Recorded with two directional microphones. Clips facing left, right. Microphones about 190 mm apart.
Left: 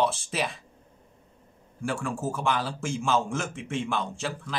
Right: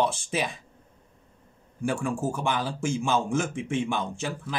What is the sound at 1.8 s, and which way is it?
A man's voice, 15° right (ahead or behind).